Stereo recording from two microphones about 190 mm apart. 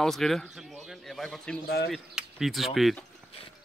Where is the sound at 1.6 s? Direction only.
55° left (ahead or behind).